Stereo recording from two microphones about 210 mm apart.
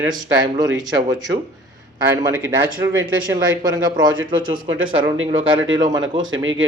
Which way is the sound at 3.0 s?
20° right (ahead or behind).